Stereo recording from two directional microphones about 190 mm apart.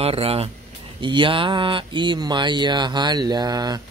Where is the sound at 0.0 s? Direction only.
30° right (ahead or behind).